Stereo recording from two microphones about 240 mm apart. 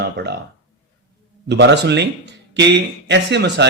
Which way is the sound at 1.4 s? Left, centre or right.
Right.